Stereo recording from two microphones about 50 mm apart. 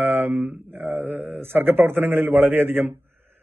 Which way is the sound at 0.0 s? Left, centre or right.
Right.